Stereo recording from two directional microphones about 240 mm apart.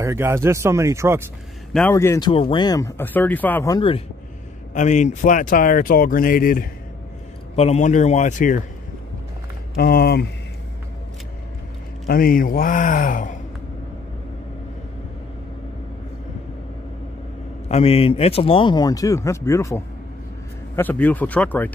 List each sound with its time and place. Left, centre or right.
0.0 s speech: centre
1.7 s speech: centre
4.7 s speech: left
7.5 s speech: left
9.8 s speech: left
12.1 s speech: left
17.6 s speech: left; by 21.7 s centre